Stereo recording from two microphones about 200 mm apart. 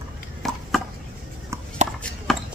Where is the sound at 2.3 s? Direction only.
Centre (ahead or behind).